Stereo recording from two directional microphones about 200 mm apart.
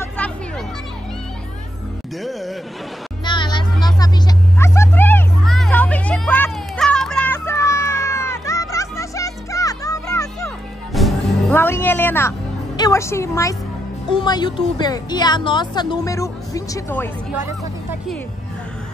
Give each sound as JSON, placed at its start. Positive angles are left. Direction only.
{"t": 0.2, "sound": "children playing", "side_deg": 10}
{"t": 3.3, "sound": "music", "side_deg": 25}
{"t": 4.6, "sound": "children playing", "side_deg": 15}
{"t": 10.9, "sound": "music", "side_deg": 0}
{"t": 11.5, "sound": "a woman's voice", "side_deg": 10}